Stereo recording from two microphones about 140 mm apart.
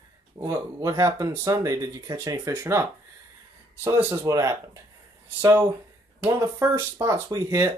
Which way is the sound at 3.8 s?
20° right (ahead or behind).